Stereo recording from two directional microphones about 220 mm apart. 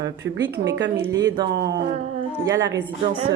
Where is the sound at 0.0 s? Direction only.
55° right (ahead or behind).